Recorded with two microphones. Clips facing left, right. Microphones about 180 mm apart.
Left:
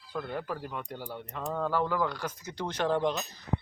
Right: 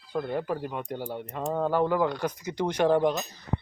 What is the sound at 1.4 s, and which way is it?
Speech, 30° right (ahead or behind).